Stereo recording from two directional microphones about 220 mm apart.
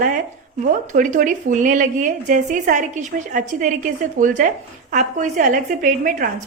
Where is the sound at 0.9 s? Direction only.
35° right (ahead or behind).